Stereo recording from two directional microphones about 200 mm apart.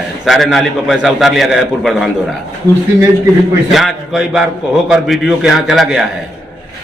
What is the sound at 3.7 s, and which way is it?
A man's voice, centre (ahead or behind).